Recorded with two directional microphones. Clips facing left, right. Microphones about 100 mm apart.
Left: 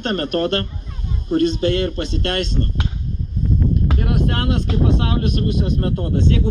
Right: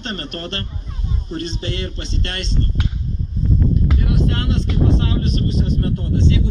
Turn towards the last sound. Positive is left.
turn(degrees=50)  # may be behind; listen again after turning